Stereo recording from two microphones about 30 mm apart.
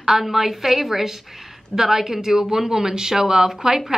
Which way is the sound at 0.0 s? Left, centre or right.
Centre.